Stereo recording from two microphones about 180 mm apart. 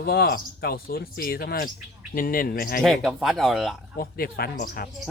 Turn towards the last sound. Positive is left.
turn(degrees=55)  # may be behind; listen again after turning